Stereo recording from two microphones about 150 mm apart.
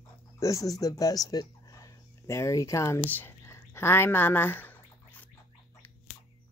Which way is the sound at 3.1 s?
15° left (ahead or behind).